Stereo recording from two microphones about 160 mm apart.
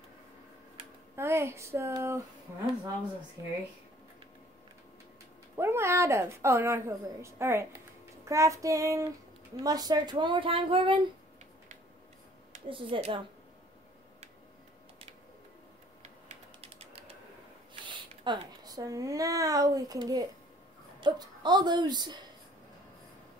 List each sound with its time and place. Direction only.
1.1 s a woman's voice: 15° right (ahead or behind)
5.6 s a woman's voice: 15° right (ahead or behind); by 11.1 s 35° right (ahead or behind)
12.6 s speech: 35° right (ahead or behind)
16.0 s typing: 40° right (ahead or behind)
17.8 s a sound: 30° right (ahead or behind)
18.6 s speech: 25° right (ahead or behind)